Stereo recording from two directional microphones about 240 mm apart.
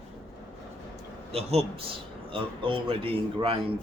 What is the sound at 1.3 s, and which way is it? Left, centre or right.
Speech, right.